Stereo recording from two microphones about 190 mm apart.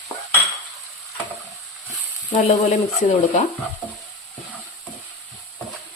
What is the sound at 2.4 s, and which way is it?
Speech, 35° left (ahead or behind).